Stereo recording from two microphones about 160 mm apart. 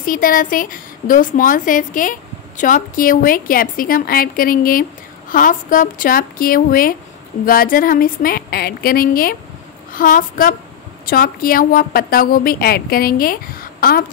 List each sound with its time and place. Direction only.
0.0 s a woman's voice: 60° left (ahead or behind)